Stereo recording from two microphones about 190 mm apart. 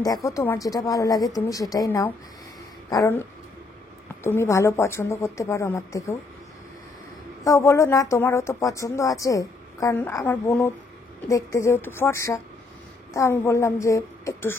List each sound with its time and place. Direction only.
0.0 s a woman's voice: 20° left (ahead or behind)
7.4 s a woman's voice: 15° left (ahead or behind)